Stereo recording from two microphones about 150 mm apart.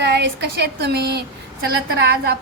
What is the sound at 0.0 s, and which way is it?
Speech, 90° right.